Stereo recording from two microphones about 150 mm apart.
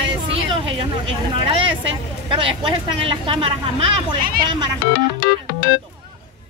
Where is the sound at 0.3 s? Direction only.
35° right (ahead or behind).